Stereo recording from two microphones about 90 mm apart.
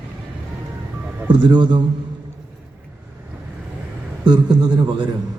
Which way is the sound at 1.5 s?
55° right (ahead or behind).